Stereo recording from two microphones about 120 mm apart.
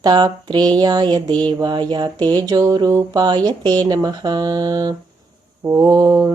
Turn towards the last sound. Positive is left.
turn(degrees=-30)  # may be behind; listen again after turning